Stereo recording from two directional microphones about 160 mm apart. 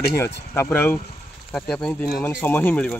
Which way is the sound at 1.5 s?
Centre (ahead or behind).